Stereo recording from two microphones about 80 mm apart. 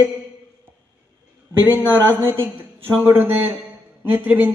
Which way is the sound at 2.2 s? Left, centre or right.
Right.